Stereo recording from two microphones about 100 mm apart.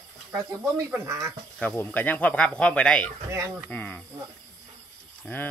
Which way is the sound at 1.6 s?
15° left (ahead or behind).